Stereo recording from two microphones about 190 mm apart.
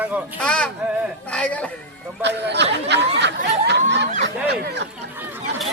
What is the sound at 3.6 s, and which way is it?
Snicker, 65° right (ahead or behind).